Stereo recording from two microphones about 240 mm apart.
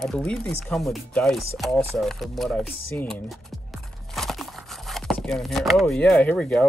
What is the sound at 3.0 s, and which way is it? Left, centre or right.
Music, centre.